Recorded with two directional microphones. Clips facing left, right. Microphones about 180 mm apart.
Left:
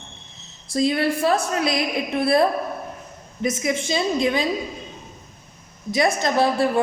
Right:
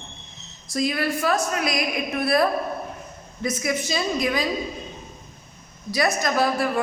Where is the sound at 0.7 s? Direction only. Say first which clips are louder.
Left 4 dB; 25° left (ahead or behind).